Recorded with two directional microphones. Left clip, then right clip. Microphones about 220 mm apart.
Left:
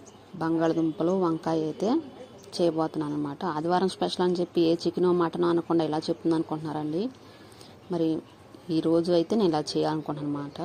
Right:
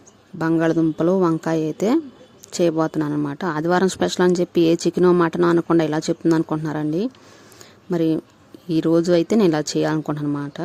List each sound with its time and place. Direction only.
0.3 s speech: 40° right (ahead or behind)